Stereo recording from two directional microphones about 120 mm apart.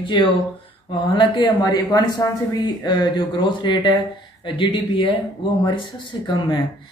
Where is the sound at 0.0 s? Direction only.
40° left (ahead or behind).